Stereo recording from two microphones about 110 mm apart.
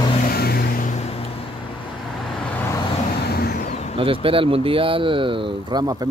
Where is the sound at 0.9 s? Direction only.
65° left (ahead or behind).